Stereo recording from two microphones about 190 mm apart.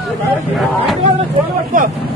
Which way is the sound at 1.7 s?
45° right (ahead or behind).